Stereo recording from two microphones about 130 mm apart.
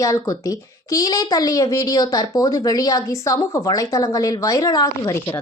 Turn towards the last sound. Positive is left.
turn(degrees=25)  # may be behind; listen again after turning